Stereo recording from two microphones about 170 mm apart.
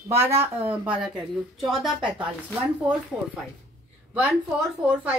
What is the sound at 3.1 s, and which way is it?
A woman's voice, 5° right (ahead or behind).